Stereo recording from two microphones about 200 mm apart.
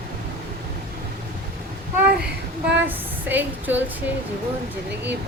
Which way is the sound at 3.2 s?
10° right (ahead or behind).